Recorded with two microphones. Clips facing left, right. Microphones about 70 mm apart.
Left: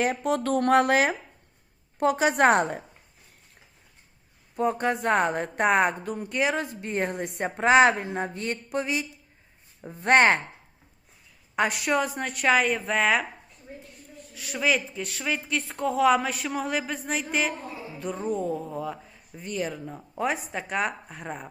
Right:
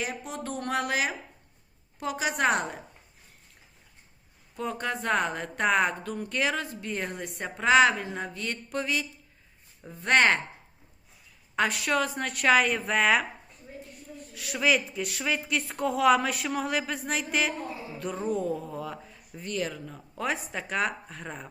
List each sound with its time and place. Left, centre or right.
0.0 s a woman's voice: left
4.5 s speech: left
8.7 s speech: centre
11.5 s speech: centre
14.3 s speech: centre
20.2 s a woman's voice: centre